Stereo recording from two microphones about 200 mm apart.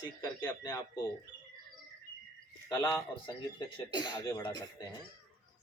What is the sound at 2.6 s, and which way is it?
Speech, 15° left (ahead or behind).